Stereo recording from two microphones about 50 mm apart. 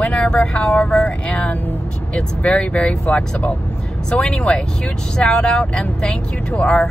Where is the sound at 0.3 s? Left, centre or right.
Centre.